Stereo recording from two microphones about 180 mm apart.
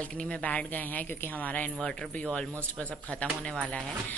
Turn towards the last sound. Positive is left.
turn(degrees=5)  # may be behind; listen again after turning